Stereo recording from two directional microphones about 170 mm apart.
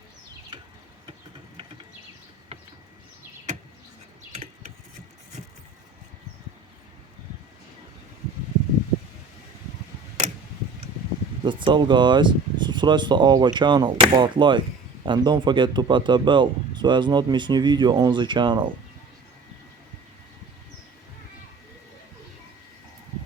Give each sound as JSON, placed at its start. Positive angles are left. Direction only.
{"t": 4.3, "sound": "rodents", "side_deg": -40}
{"t": 11.4, "sound": "speech", "side_deg": -30}